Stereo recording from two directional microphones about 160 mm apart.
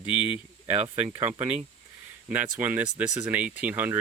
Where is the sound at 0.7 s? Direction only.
10° right (ahead or behind).